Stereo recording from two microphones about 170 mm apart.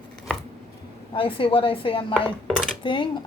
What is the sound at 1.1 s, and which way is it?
Speech, 30° left (ahead or behind).